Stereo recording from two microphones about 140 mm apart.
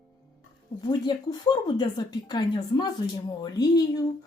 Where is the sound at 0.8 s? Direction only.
30° left (ahead or behind).